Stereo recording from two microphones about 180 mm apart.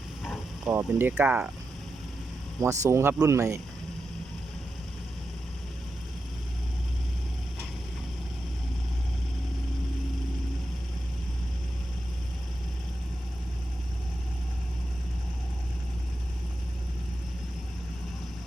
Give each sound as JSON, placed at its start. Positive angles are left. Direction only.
{"t": 0.7, "sound": "speech", "side_deg": -15}
{"t": 2.6, "sound": "speech", "side_deg": -15}